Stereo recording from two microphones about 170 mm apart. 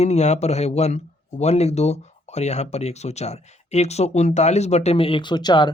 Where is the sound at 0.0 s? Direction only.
40° left (ahead or behind).